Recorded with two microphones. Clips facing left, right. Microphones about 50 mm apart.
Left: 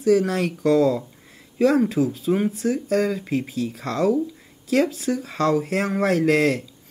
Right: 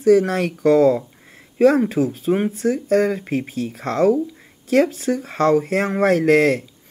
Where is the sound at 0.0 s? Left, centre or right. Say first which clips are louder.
Right 4 dB; right.